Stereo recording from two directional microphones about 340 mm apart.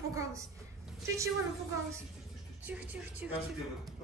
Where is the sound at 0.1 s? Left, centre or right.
Centre.